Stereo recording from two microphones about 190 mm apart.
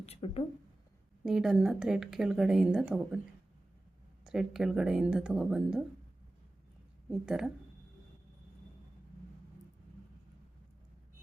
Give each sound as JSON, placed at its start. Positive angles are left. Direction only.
{"t": 0.0, "sound": "speech", "side_deg": 30}
{"t": 1.2, "sound": "speech", "side_deg": -5}
{"t": 4.2, "sound": "speech", "side_deg": -5}
{"t": 7.1, "sound": "speech", "side_deg": -5}